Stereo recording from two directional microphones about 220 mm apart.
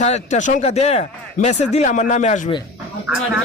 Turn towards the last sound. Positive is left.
turn(degrees=-5)  # may be behind; listen again after turning